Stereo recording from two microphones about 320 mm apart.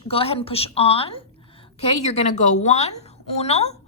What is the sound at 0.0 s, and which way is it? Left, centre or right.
A woman's voice, centre.